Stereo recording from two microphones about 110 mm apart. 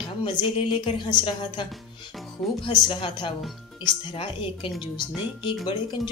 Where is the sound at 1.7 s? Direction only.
Centre (ahead or behind).